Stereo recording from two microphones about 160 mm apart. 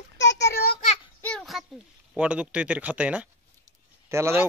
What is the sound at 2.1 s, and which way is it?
Speech, 5° right (ahead or behind).